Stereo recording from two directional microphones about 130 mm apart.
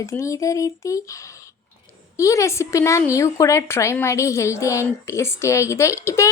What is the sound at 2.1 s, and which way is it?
Speech, 25° left (ahead or behind).